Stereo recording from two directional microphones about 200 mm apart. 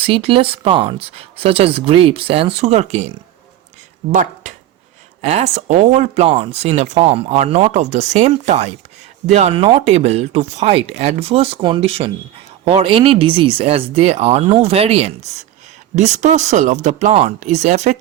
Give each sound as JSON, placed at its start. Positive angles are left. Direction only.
{"t": 0.0, "sound": "speech", "side_deg": -25}
{"t": 4.1, "sound": "speech", "side_deg": -40}